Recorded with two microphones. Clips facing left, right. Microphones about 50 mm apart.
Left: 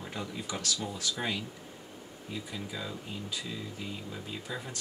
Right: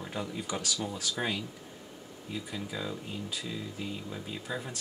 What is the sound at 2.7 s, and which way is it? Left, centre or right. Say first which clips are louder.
Speech: right 2 dB; centre.